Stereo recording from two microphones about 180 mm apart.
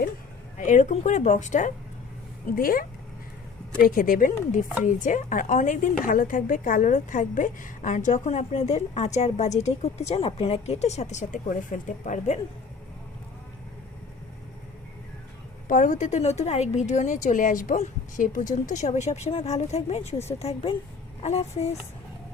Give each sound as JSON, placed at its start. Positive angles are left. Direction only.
{"t": 0.5, "sound": "a woman's voice", "side_deg": 40}
{"t": 15.6, "sound": "a woman's voice", "side_deg": 45}